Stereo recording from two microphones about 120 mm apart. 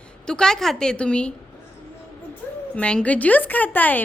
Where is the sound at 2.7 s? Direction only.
10° left (ahead or behind).